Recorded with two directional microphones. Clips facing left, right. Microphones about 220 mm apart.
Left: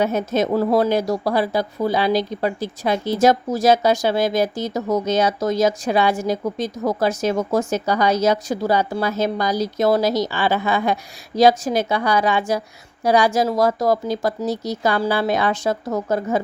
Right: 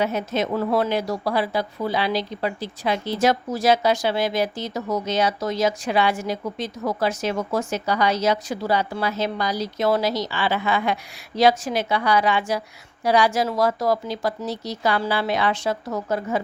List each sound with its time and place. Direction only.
0.0 s speech: 45° left (ahead or behind)